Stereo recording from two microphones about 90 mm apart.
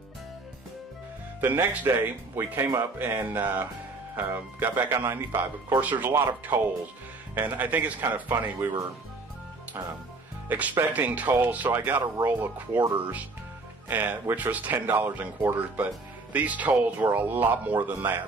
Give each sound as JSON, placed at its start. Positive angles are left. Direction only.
{"t": 1.4, "sound": "speech", "side_deg": -20}
{"t": 10.5, "sound": "speech", "side_deg": -20}
{"t": 13.8, "sound": "speech", "side_deg": -20}